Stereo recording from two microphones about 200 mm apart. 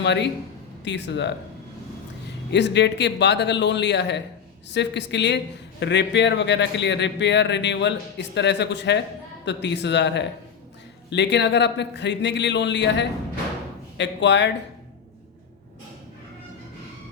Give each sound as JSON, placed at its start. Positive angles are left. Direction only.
{"t": 0.0, "sound": "speech", "side_deg": 60}
{"t": 2.5, "sound": "speech", "side_deg": 60}